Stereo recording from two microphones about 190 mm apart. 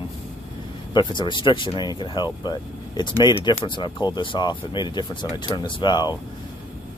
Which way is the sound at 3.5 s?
25° left (ahead or behind).